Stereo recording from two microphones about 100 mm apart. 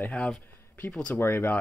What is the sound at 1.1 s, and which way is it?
Speech, 25° left (ahead or behind).